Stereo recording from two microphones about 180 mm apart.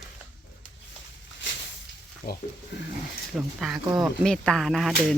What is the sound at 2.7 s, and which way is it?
Speech, 70° left (ahead or behind).